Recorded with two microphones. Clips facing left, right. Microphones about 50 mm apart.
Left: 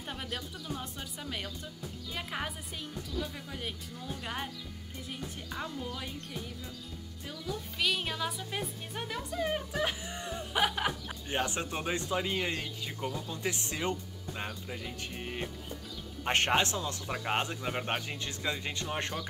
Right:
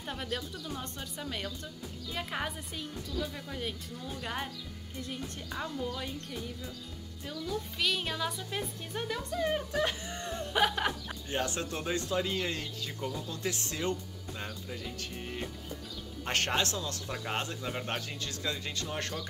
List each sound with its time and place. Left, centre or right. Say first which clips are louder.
0.1 s speech: right 3 dB; centre
7.2 s speech: right 3 dB; centre
11.2 s a man's voice: left 1 dB; left